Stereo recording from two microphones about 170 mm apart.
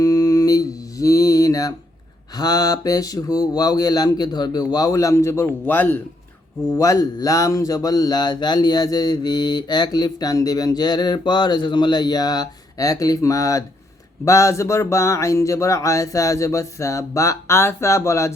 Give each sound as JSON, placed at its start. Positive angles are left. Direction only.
{"t": 0.0, "sound": "music", "side_deg": 20}
{"t": 2.3, "sound": "speech", "side_deg": 20}